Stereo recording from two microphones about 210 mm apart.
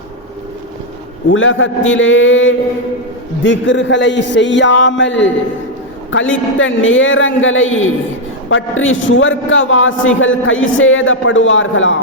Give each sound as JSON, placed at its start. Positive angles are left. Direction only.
{"t": 1.3, "sound": "a man's voice", "side_deg": 65}